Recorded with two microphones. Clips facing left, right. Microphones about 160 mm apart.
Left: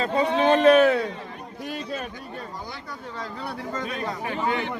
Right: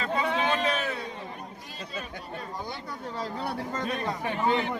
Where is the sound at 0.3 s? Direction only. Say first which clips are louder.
Left 11 dB; 45° left (ahead or behind); by 1.0 s 70° left (ahead or behind).